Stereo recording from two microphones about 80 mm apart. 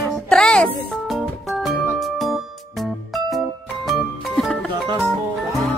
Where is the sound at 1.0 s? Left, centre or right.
Centre.